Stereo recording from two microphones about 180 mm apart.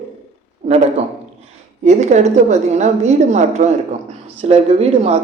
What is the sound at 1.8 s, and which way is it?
A woman's voice, 40° right (ahead or behind).